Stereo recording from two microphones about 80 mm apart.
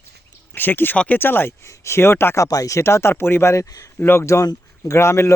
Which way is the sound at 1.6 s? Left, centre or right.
Left.